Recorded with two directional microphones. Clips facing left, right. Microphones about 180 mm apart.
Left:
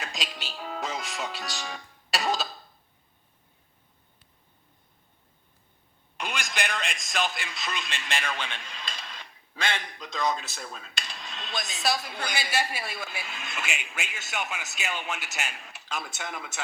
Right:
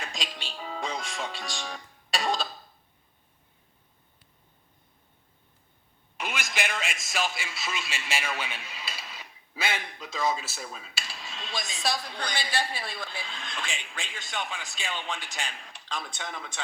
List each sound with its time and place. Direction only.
0.0 s music: centre (ahead or behind)
6.1 s a man's voice: 5° right (ahead or behind)